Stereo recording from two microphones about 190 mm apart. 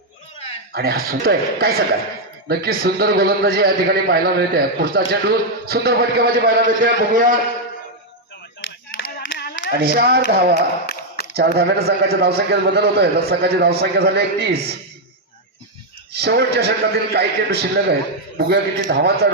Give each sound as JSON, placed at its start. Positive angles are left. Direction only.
{"t": 0.7, "sound": "a man's voice", "side_deg": -55}
{"t": 8.6, "sound": "clapping", "side_deg": 65}
{"t": 9.6, "sound": "a man's voice", "side_deg": -55}
{"t": 10.8, "sound": "a sound", "side_deg": 55}
{"t": 11.3, "sound": "a man's voice", "side_deg": -60}
{"t": 16.1, "sound": "a man's voice", "side_deg": -60}